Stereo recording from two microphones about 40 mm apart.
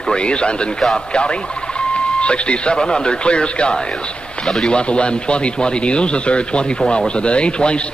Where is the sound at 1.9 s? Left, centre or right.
Left.